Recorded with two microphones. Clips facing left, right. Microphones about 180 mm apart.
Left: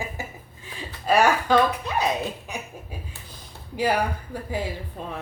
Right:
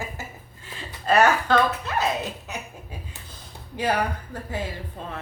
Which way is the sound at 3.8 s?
10° left (ahead or behind).